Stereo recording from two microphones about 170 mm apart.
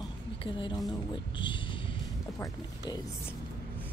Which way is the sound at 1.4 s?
30° left (ahead or behind).